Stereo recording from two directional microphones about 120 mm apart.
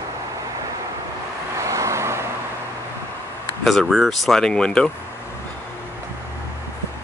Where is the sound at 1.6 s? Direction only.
25° right (ahead or behind).